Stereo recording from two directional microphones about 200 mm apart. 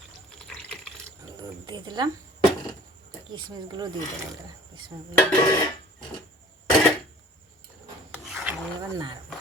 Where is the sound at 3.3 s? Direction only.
20° right (ahead or behind).